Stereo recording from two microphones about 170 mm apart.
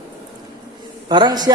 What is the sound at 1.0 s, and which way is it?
Speech, 25° right (ahead or behind).